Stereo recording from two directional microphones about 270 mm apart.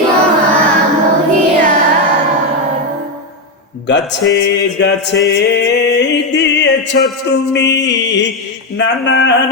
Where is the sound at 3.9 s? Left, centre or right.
Left.